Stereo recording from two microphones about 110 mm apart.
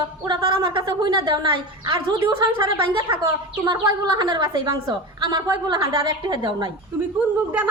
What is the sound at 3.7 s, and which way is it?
A woman's voice, 40° right (ahead or behind).